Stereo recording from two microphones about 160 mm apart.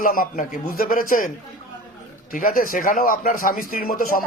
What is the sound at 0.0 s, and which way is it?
A man's voice, 60° left (ahead or behind).